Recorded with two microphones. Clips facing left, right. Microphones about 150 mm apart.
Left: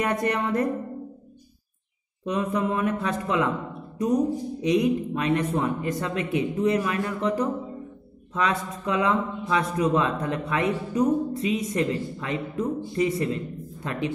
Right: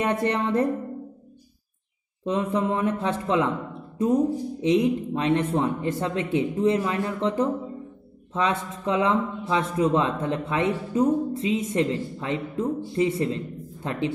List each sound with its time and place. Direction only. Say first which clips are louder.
0.0 s speech: right 1 dB; 25° right (ahead or behind)
2.2 s speech: right 1 dB; 30° right (ahead or behind)
4.6 s speech: right 1 dB; 25° right (ahead or behind)